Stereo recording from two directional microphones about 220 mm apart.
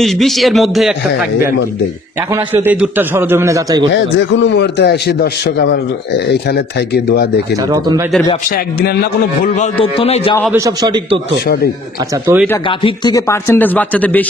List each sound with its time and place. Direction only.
0.0 s speech: centre (ahead or behind)
2.3 s a man's voice: 10° right (ahead or behind)
3.9 s a man's voice: 55° left (ahead or behind)
7.5 s a man's voice: 15° right (ahead or behind)
8.5 s a man's voice: 45° left (ahead or behind)
9.6 s speech: 25° left (ahead or behind)
10.5 s a man's voice: 15° right (ahead or behind)
11.4 s a man's voice: 45° left (ahead or behind)
12.3 s a man's voice: 10° right (ahead or behind)
12.6 s speech: 20° left (ahead or behind)